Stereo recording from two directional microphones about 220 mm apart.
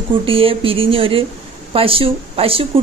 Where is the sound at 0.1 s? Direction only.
25° right (ahead or behind).